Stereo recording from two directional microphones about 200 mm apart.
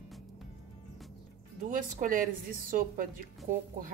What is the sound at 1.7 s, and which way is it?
A woman's voice, 40° right (ahead or behind).